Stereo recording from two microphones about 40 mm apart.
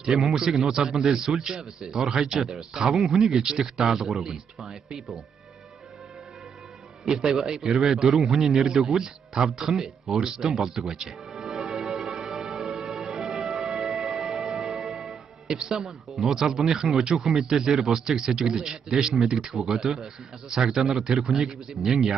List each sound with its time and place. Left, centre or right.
0.0 s a man's voice: centre
7.1 s a man's voice: centre
11.6 s music: centre
12.8 s music: centre
15.4 s a man's voice: centre